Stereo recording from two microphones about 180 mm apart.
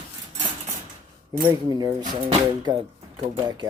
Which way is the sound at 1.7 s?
25° right (ahead or behind).